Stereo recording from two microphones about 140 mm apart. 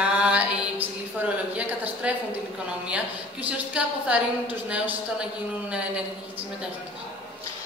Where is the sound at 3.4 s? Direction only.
10° right (ahead or behind).